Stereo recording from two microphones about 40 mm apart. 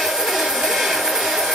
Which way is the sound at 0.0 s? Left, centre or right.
Centre.